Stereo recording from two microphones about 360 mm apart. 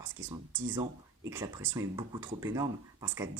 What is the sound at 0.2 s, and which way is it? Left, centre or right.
Speech, right.